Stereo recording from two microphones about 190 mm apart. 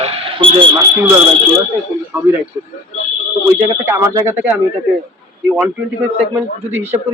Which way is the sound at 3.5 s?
15° right (ahead or behind).